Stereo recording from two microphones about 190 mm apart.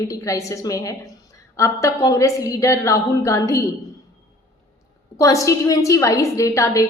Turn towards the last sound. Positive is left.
turn(degrees=15)  # may be behind; listen again after turning